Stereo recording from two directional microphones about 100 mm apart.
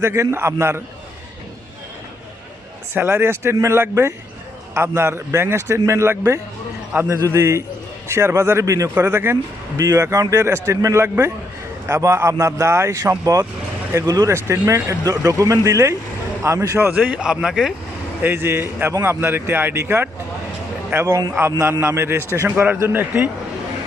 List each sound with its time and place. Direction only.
0.0 s a man's voice: 30° right (ahead or behind)
2.9 s a man's voice: 25° right (ahead or behind)
6.9 s speech: 15° right (ahead or behind)
7.3 s a man's voice: 30° right (ahead or behind)
9.8 s a man's voice: 35° right (ahead or behind)
16.9 s speech: 10° right (ahead or behind)
18.2 s a man's voice: 20° right (ahead or behind)